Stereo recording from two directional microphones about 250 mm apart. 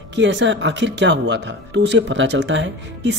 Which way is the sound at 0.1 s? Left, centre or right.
Right.